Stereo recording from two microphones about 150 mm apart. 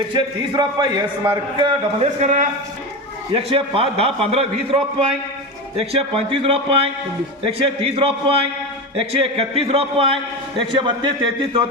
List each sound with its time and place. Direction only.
0.1 s a man's voice: 25° right (ahead or behind)
2.2 s a man's voice: 55° right (ahead or behind)
3.3 s a man's voice: 40° right (ahead or behind)